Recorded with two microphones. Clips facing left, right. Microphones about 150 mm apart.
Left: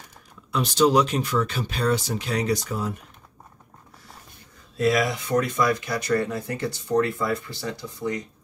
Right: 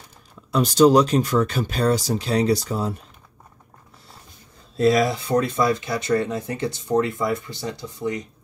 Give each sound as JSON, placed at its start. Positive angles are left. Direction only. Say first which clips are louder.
{"t": 0.5, "sound": "speech", "louder": "right 5 dB", "side_deg": -40}
{"t": 4.7, "sound": "speech", "louder": "right 4 dB", "side_deg": -30}